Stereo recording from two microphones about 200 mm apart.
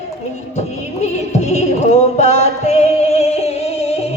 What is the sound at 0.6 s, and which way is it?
Music, 35° left (ahead or behind).